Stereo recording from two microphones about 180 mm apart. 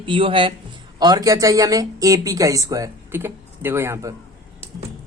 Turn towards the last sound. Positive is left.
turn(degrees=-15)  # may be behind; listen again after turning